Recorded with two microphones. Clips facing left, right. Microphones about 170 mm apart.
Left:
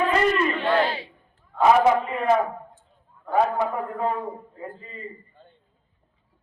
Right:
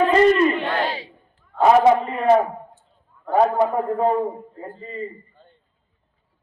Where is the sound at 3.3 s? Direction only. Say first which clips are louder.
Right 5 dB; 40° right (ahead or behind).